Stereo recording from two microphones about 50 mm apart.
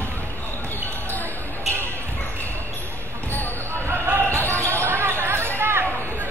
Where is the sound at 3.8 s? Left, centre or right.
Right.